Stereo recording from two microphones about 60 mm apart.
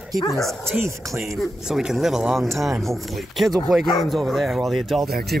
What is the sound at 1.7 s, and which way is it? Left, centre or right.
Speech, centre.